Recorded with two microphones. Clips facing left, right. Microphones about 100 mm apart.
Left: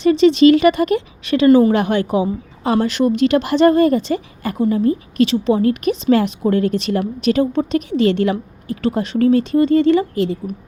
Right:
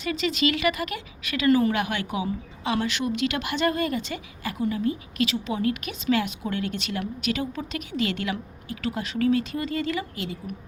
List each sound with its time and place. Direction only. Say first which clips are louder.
0.0 s speech: left 15 dB; 30° left (ahead or behind)